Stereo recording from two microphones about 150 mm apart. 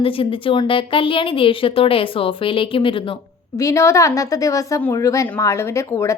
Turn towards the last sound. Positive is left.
turn(degrees=20)  # may be behind; listen again after turning